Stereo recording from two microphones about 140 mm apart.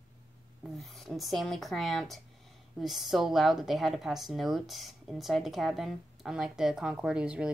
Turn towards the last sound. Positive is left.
turn(degrees=-10)  # may be behind; listen again after turning